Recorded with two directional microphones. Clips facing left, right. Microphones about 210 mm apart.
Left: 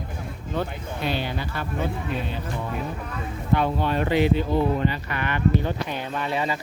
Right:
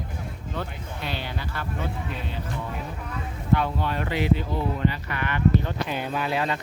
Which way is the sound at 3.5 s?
25° left (ahead or behind).